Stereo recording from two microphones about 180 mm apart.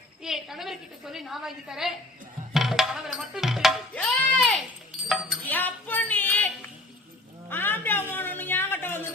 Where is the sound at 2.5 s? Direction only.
Centre (ahead or behind).